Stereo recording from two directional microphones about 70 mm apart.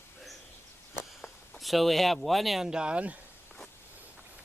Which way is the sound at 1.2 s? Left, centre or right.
Centre.